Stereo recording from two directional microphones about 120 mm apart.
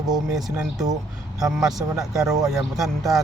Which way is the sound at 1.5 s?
Centre (ahead or behind).